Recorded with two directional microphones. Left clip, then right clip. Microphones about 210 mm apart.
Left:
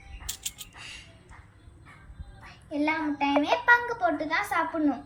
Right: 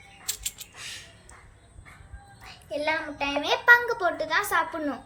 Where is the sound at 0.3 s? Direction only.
5° right (ahead or behind).